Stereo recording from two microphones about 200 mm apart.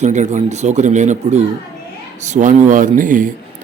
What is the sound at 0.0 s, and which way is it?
A man's voice, 35° right (ahead or behind).